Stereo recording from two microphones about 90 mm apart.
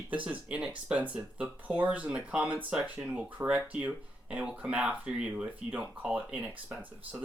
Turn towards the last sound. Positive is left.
turn(degrees=-20)  # may be behind; listen again after turning